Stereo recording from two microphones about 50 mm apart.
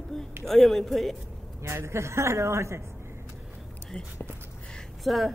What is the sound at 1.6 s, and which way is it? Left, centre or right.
A woman's voice, right.